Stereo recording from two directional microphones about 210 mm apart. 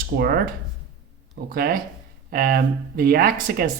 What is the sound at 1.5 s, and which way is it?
Speech, 45° right (ahead or behind).